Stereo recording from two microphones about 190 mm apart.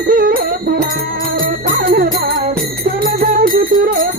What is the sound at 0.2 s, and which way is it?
Music, 50° right (ahead or behind).